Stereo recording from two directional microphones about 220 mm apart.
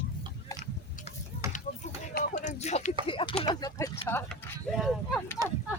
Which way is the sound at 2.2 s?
35° left (ahead or behind).